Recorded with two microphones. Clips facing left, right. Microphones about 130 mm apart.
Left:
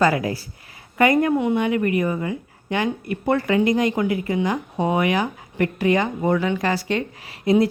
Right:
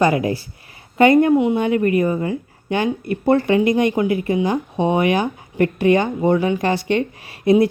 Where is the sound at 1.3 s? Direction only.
15° right (ahead or behind).